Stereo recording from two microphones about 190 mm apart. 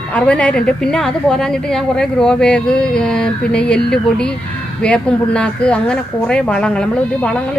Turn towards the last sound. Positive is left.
turn(degrees=5)  # may be behind; listen again after turning